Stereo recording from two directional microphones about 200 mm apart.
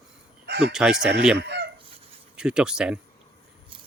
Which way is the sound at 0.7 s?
5° right (ahead or behind).